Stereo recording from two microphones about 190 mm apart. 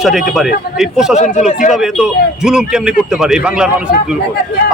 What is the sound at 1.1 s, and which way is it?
Speech, 35° left (ahead or behind).